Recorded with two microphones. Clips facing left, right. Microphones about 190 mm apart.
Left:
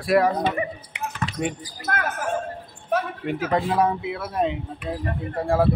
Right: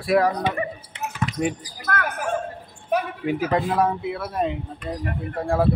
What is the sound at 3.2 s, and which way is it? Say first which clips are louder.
Speech: right 1 dB; 5° left (ahead or behind).